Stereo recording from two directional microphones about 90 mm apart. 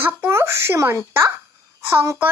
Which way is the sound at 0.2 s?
30° right (ahead or behind).